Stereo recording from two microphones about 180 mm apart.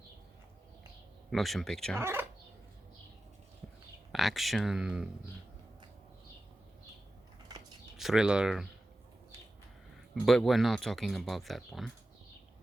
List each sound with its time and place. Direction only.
1.3 s speech: centre (ahead or behind)
2.0 s speech: 15° right (ahead or behind)
4.1 s speech: centre (ahead or behind)
7.5 s a sound: 20° right (ahead or behind)
7.9 s speech: centre (ahead or behind)
10.2 s speech: centre (ahead or behind)